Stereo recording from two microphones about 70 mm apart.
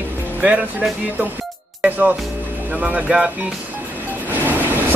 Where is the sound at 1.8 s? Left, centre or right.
Right.